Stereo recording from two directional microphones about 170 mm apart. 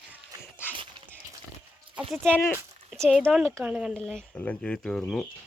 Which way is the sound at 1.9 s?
5° right (ahead or behind).